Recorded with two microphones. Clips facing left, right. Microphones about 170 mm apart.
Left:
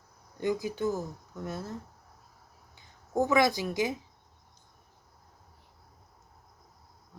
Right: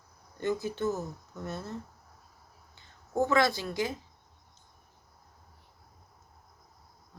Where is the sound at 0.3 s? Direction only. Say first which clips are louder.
Left 1 dB; 10° left (ahead or behind).